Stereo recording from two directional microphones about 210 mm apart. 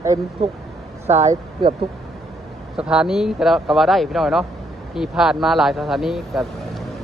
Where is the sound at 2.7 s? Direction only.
5° right (ahead or behind).